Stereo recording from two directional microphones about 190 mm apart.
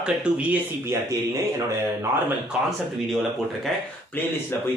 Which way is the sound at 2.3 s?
5° right (ahead or behind).